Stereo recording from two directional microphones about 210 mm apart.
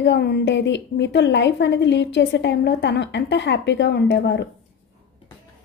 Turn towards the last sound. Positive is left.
turn(degrees=55)  # may be behind; listen again after turning